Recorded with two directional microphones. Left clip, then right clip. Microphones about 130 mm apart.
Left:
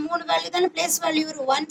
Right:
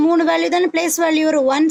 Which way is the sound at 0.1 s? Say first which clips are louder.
Right 8 dB; 20° right (ahead or behind).